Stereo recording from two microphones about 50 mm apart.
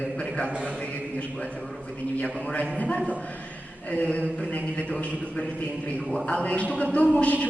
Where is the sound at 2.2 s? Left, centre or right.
Left.